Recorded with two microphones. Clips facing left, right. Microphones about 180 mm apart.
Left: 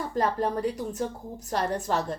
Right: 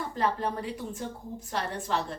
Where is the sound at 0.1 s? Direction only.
40° left (ahead or behind).